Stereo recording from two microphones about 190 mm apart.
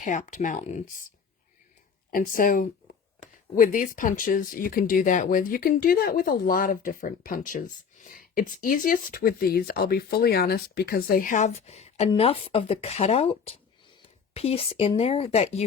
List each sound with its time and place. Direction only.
0.0 s speech: 40° left (ahead or behind)
2.0 s speech: 45° left (ahead or behind)